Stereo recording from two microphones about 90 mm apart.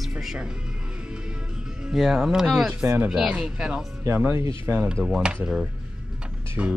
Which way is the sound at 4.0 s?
30° right (ahead or behind).